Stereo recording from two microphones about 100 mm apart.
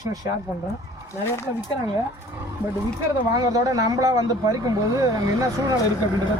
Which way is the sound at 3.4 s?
35° right (ahead or behind).